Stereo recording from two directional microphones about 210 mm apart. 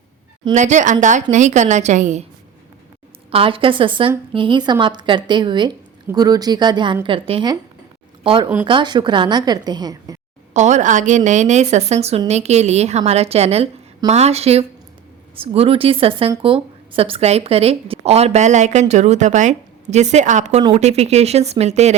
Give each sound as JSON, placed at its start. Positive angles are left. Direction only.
{"t": 0.5, "sound": "speech", "side_deg": -35}
{"t": 3.3, "sound": "speech", "side_deg": -25}
{"t": 10.5, "sound": "speech", "side_deg": -35}